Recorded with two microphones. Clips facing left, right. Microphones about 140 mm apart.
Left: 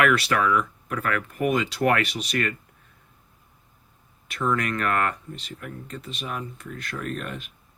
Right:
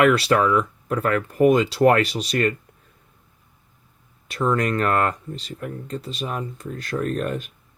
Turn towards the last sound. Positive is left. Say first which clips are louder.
# right 8 dB
turn(degrees=-40)  # may be behind; listen again after turning